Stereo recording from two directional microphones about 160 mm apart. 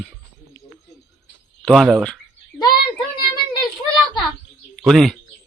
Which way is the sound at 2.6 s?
25° left (ahead or behind).